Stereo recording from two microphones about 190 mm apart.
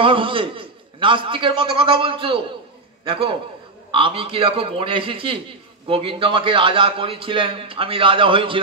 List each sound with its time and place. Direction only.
0.0 s a man's voice: 25° right (ahead or behind)